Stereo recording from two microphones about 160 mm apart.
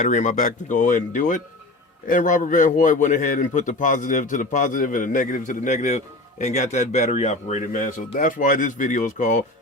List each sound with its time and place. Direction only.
0.0 s a man's voice: 50° left (ahead or behind)